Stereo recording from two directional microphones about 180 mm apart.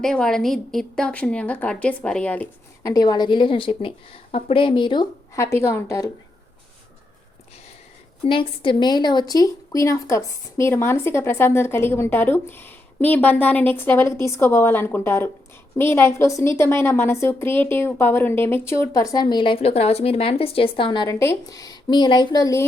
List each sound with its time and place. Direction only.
0.0 s a woman's voice: 5° left (ahead or behind)
2.8 s a woman's voice: 20° left (ahead or behind)
8.2 s speech: 30° left (ahead or behind)